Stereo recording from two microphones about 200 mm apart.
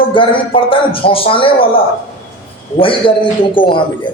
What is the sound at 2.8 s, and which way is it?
A man's voice, 25° left (ahead or behind).